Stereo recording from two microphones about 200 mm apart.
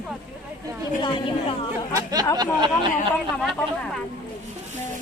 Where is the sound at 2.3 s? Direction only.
25° right (ahead or behind).